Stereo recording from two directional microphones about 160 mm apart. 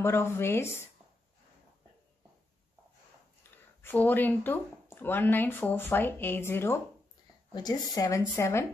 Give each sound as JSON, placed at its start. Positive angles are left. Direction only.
{"t": 0.0, "sound": "speech", "side_deg": 15}
{"t": 3.8, "sound": "speech", "side_deg": 10}